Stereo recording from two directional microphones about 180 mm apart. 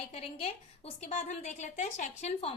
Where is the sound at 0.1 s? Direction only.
35° left (ahead or behind).